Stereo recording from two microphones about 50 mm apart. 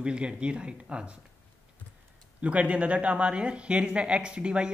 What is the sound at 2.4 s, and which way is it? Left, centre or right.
A woman's voice, right.